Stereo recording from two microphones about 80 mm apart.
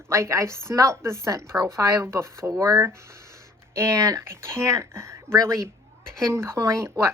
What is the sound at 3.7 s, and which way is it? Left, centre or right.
A woman's voice, right.